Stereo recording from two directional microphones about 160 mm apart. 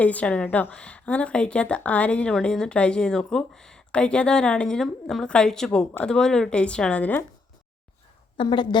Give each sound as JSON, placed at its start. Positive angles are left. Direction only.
{"t": 0.0, "sound": "a woman's voice", "side_deg": 10}
{"t": 8.4, "sound": "speech", "side_deg": 30}